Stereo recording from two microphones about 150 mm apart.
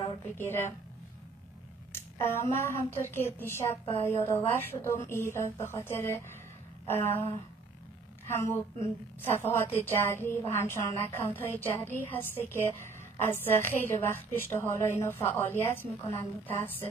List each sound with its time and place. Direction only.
0.4 s a woman's voice: 15° left (ahead or behind)
2.1 s a woman's voice: 15° left (ahead or behind)
8.3 s a woman's voice: 15° left (ahead or behind)